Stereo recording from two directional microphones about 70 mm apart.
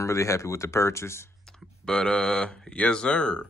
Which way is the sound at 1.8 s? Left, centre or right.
Centre.